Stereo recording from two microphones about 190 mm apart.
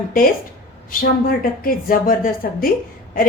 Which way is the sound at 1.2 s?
50° left (ahead or behind).